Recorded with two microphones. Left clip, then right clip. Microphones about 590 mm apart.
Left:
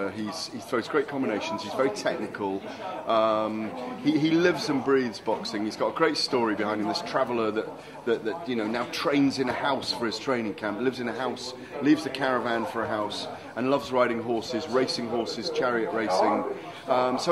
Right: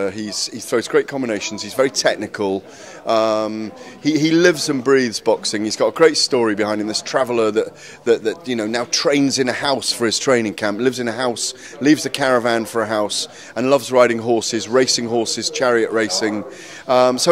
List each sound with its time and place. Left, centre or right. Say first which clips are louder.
0.0 s speech: right 9 dB; right